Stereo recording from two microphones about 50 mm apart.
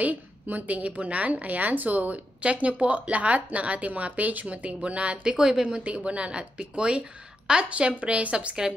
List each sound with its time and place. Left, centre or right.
0.0 s a woman's voice: right; by 5.8 s centre
5.9 s a woman's voice: right